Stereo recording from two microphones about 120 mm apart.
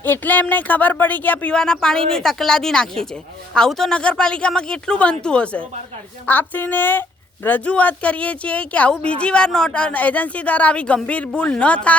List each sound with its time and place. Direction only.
0.0 s speech: 15° left (ahead or behind)